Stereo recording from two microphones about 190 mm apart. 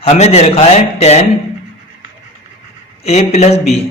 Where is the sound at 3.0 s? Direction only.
35° left (ahead or behind).